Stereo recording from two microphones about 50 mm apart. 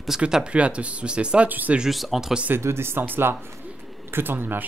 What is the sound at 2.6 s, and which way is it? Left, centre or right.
Speech, right.